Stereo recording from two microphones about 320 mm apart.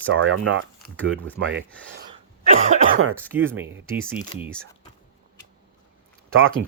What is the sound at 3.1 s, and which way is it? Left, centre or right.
Speech, centre.